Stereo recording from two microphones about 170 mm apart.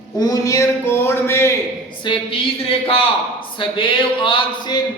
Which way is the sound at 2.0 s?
30° left (ahead or behind).